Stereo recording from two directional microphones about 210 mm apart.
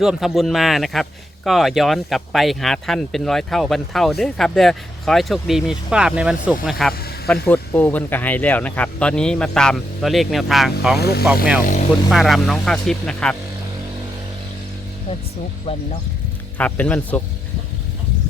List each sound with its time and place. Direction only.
0.0 s speech: centre (ahead or behind)
10.9 s speech: 50° left (ahead or behind)
11.6 s speech: 35° left (ahead or behind)
12.1 s speech: centre (ahead or behind)
16.6 s a man's voice: 5° left (ahead or behind)